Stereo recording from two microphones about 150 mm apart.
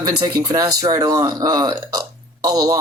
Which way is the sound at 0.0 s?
25° right (ahead or behind).